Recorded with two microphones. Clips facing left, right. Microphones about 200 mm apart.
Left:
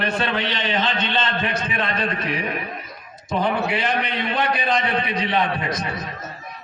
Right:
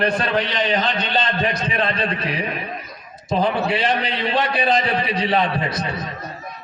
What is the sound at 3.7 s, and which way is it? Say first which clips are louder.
A man's voice: right 2 dB; 30° right (ahead or behind).